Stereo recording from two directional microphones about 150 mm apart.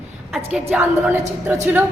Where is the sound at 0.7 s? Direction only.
10° right (ahead or behind).